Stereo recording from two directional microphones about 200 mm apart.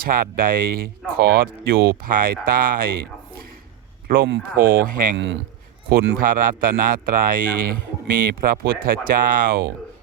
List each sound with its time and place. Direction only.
0.0 s speech: 45° right (ahead or behind)
4.1 s speech: 45° right (ahead or behind)
5.1 s a man's voice: 65° right (ahead or behind)
5.9 s speech: 55° right (ahead or behind)